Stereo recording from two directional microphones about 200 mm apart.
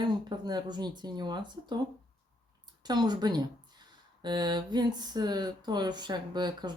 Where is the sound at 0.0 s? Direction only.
20° right (ahead or behind).